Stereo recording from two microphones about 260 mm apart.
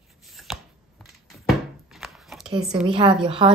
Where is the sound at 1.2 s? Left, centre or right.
Centre.